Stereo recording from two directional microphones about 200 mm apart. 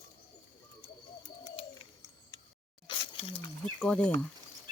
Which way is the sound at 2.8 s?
25° left (ahead or behind).